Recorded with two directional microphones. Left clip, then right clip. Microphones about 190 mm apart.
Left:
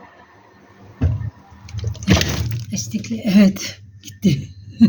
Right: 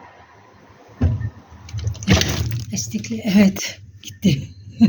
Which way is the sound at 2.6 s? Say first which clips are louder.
Left 2 dB; 10° left (ahead or behind).